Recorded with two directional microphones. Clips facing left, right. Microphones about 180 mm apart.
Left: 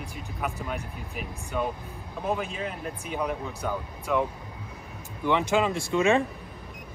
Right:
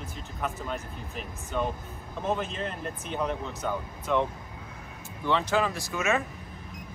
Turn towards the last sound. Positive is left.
turn(degrees=30)  # may be behind; listen again after turning